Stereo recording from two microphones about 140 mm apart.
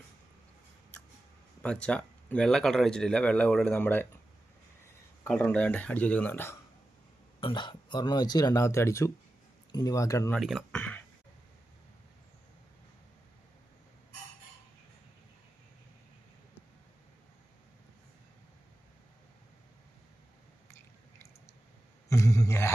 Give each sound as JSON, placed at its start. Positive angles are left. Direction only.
{"t": 1.6, "sound": "speech", "side_deg": 5}
{"t": 5.2, "sound": "speech", "side_deg": 10}
{"t": 7.4, "sound": "speech", "side_deg": 35}
{"t": 10.3, "sound": "speech", "side_deg": 5}
{"t": 22.1, "sound": "a sound", "side_deg": 20}